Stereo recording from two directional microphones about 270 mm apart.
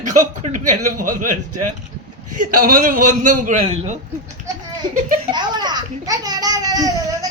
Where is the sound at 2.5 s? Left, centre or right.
Right.